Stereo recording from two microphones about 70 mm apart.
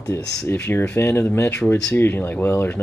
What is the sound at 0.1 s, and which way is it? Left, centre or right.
Speech, left.